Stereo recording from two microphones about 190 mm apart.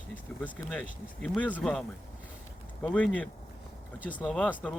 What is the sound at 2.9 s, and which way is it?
Speech, 5° left (ahead or behind).